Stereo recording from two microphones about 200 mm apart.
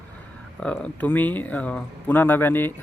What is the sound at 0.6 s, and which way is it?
Speech, 5° left (ahead or behind).